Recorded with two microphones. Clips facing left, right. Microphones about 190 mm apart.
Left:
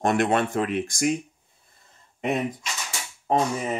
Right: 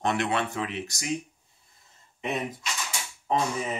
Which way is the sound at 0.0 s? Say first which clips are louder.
Left 5 dB; 50° left (ahead or behind).